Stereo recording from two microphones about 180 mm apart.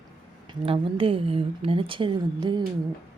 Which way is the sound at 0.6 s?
30° right (ahead or behind).